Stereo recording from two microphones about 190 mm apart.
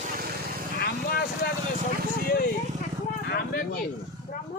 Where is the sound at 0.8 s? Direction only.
55° left (ahead or behind).